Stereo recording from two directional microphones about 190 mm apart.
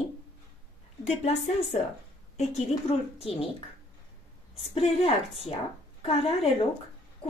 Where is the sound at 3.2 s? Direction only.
30° left (ahead or behind).